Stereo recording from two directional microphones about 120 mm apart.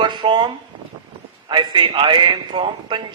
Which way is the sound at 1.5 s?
40° right (ahead or behind).